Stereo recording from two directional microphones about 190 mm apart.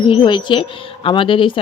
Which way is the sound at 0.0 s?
25° left (ahead or behind).